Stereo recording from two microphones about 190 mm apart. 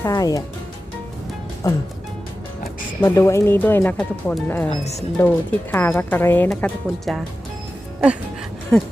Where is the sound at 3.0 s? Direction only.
15° left (ahead or behind).